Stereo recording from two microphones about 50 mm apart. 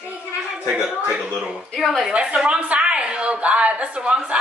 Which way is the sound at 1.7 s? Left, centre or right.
Centre.